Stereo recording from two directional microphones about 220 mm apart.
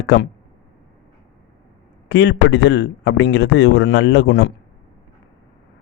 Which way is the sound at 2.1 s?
50° left (ahead or behind).